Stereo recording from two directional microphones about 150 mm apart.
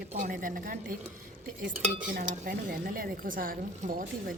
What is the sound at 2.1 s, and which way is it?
Speech, 70° right (ahead or behind).